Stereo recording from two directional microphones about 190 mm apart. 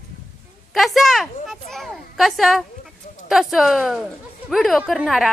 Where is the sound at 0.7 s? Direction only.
Centre (ahead or behind).